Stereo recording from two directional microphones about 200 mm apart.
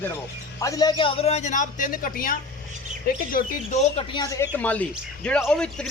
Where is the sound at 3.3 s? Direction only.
35° left (ahead or behind).